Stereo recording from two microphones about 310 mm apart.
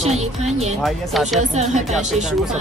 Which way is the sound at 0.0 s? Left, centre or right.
Right.